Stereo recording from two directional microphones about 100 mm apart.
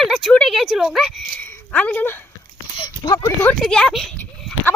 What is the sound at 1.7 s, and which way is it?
Speech, 15° left (ahead or behind).